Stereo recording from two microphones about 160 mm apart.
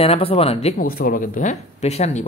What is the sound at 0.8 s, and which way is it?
Speech, 65° left (ahead or behind).